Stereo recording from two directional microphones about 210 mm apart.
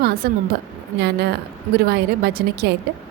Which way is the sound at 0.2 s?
45° right (ahead or behind).